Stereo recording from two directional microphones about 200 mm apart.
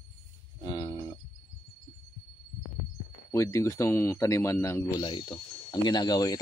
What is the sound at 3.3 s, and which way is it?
A man's voice, 15° left (ahead or behind).